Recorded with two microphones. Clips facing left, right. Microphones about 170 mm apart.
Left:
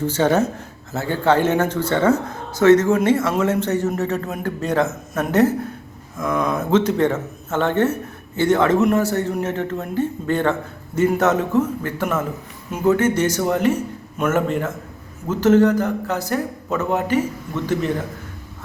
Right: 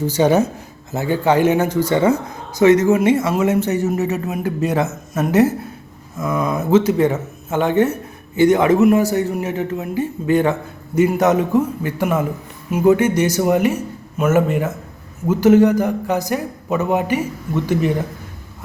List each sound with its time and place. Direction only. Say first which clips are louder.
0.0 s speech: right 3 dB; 10° right (ahead or behind)